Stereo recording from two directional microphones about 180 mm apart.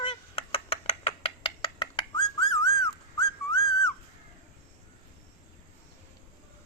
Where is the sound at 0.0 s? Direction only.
30° left (ahead or behind).